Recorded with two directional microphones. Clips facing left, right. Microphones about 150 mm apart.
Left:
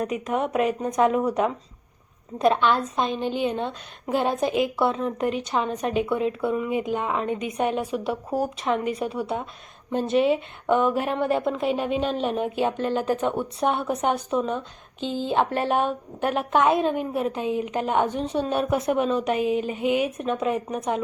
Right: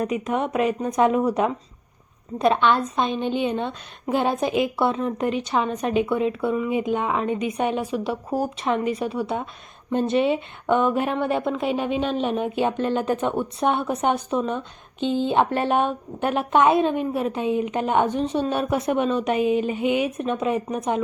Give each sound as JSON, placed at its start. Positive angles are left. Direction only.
{"t": 0.0, "sound": "a woman's voice", "side_deg": 0}